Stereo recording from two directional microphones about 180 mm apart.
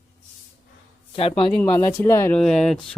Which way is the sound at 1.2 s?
30° left (ahead or behind).